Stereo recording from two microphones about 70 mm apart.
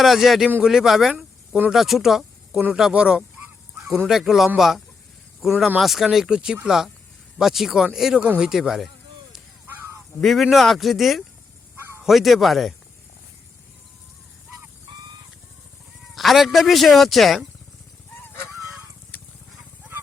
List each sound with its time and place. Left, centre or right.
0.0 s speech: centre
9.6 s goose: right
10.2 s speech: centre
16.1 s speech: centre
18.2 s honk: left
19.1 s a sound: left